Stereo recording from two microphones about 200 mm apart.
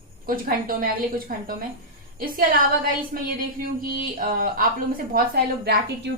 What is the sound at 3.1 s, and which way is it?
A woman's voice, 45° right (ahead or behind).